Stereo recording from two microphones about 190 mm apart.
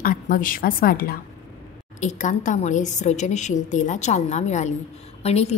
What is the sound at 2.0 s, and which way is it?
A woman's voice, 40° left (ahead or behind).